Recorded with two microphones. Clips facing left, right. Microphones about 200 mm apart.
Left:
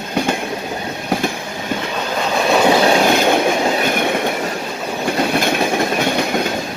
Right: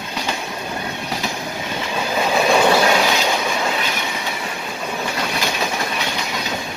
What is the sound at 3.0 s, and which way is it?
Train, 55° left (ahead or behind).